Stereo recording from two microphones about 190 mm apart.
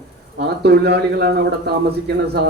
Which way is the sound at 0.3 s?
60° right (ahead or behind).